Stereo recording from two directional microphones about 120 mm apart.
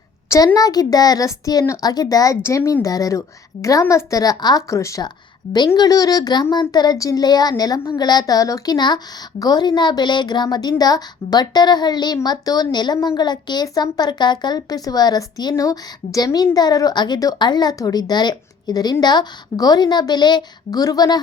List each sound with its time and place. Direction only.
0.3 s a woman's voice: 30° left (ahead or behind)